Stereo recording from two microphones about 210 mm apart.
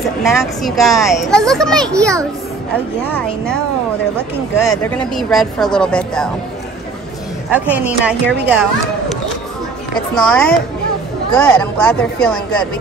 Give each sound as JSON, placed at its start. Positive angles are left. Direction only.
{"t": 0.2, "sound": "speech", "side_deg": 0}
{"t": 7.5, "sound": "a woman's voice", "side_deg": -5}
{"t": 10.1, "sound": "speech", "side_deg": 5}